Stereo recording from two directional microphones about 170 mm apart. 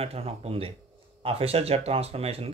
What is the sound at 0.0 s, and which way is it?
Speech, 35° right (ahead or behind).